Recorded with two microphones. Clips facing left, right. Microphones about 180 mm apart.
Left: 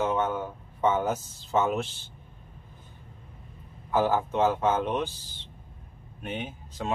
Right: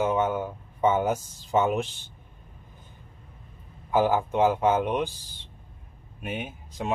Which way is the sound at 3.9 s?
15° right (ahead or behind).